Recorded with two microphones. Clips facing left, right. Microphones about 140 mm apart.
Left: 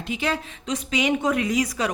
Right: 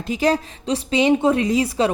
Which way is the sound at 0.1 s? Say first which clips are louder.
Right 7 dB; 40° right (ahead or behind).